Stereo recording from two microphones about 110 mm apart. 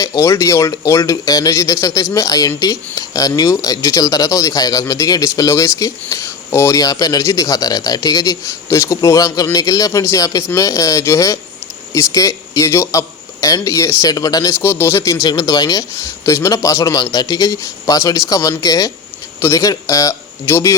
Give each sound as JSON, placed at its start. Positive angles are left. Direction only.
{"t": 0.0, "sound": "speech", "side_deg": 30}
{"t": 14.6, "sound": "speech", "side_deg": 25}